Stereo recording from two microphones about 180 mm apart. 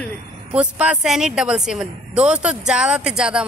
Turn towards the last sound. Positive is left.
turn(degrees=-5)  # may be behind; listen again after turning